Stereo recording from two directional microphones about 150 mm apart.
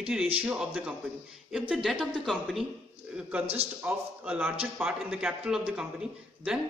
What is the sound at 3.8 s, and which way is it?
A man's voice, 10° right (ahead or behind).